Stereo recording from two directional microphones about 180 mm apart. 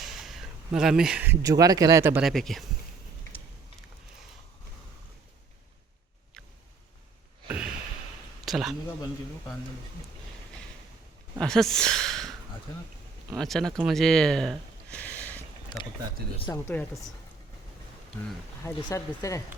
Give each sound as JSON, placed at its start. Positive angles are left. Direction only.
{"t": 0.0, "sound": "speech", "side_deg": 0}
{"t": 2.2, "sound": "speech", "side_deg": 0}
{"t": 7.4, "sound": "a sound", "side_deg": -5}
{"t": 8.4, "sound": "speech", "side_deg": 0}
{"t": 11.3, "sound": "speech", "side_deg": 5}
{"t": 13.3, "sound": "speech", "side_deg": 0}
{"t": 15.7, "sound": "speech", "side_deg": 25}
{"t": 18.6, "sound": "speech", "side_deg": 15}